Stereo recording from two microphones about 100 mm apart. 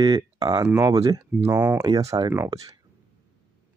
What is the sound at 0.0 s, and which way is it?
Speech, 40° right (ahead or behind).